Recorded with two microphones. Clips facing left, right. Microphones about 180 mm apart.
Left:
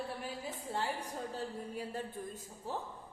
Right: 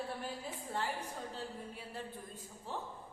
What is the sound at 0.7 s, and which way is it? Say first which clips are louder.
A woman's voice: left 1 dB; 40° left (ahead or behind).